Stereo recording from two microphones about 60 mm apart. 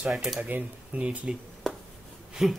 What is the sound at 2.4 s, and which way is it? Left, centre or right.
Speech, centre.